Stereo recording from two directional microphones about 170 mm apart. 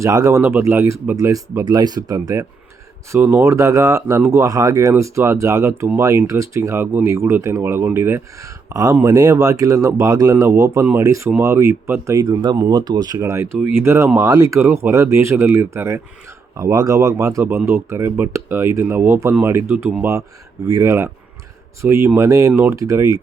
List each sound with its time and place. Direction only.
0.0 s speech: 20° right (ahead or behind)